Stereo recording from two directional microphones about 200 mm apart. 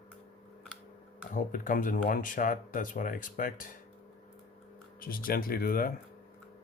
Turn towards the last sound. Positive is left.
turn(degrees=45)  # may be behind; listen again after turning